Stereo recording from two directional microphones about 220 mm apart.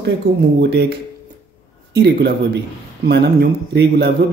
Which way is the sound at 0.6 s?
50° right (ahead or behind).